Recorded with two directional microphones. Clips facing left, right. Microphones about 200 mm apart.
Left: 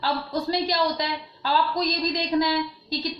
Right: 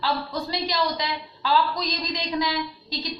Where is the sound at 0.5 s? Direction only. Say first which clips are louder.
Left 2 dB; 45° left (ahead or behind).